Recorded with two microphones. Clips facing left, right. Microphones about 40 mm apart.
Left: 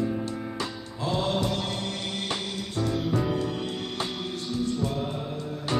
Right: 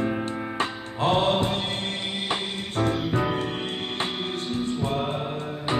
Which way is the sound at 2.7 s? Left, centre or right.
Right.